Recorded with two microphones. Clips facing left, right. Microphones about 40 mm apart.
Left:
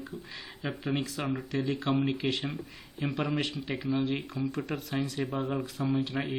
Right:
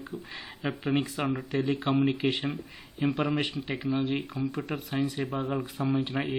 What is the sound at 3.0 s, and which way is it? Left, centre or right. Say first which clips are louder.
Speech: right 4 dB; centre.